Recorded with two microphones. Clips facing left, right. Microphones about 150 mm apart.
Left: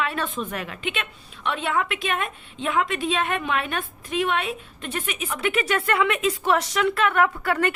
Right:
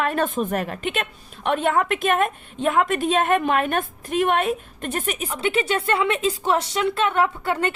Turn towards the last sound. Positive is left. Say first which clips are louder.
# even
turn(degrees=-25)  # may be behind; listen again after turning